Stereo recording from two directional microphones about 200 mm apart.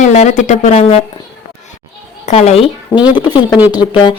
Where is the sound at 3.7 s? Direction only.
20° left (ahead or behind).